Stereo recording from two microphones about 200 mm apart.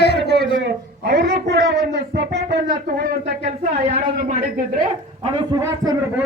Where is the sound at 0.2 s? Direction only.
60° right (ahead or behind); by 4.8 s 40° right (ahead or behind).